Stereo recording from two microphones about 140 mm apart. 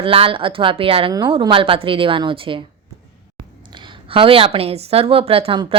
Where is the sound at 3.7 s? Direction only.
35° right (ahead or behind).